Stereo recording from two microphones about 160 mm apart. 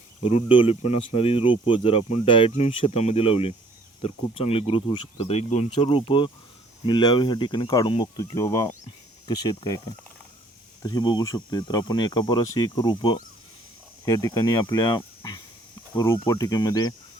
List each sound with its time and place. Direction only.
0.3 s speech: 35° left (ahead or behind)
5.7 s speech: 35° left (ahead or behind)